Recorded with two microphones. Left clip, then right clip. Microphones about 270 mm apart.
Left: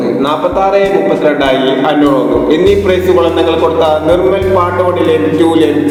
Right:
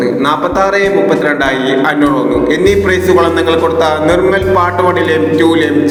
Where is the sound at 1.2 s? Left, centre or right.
Right.